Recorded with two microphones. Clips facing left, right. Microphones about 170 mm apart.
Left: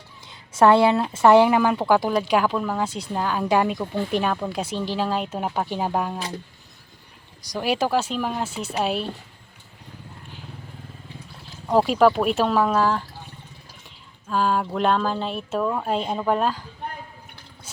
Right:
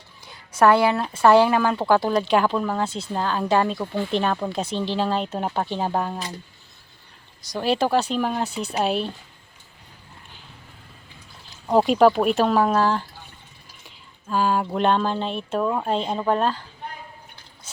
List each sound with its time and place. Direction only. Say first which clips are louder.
0.3 s a sound: left 1 dB; 25° left (ahead or behind)
1.1 s speech: even; 20° left (ahead or behind)
7.6 s speech: right 2 dB; 10° left (ahead or behind)
8.4 s speech: right 2 dB; 40° right (ahead or behind)
8.7 s speech: right 1 dB; centre (ahead or behind)
11.7 s speech: right 1 dB; centre (ahead or behind)
13.8 s a sound: right 3 dB; centre (ahead or behind)
15.0 s speech: right 1 dB; 5° left (ahead or behind)